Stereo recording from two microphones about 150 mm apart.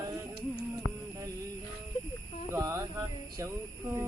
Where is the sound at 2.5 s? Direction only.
20° right (ahead or behind).